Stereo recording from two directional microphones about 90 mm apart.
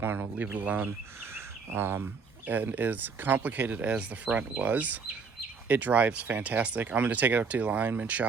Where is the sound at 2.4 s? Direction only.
20° right (ahead or behind).